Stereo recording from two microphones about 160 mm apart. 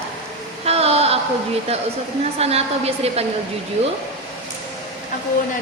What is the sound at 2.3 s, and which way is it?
Speech, 40° right (ahead or behind).